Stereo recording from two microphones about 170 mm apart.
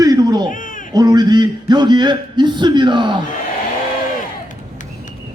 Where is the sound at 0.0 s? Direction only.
20° right (ahead or behind).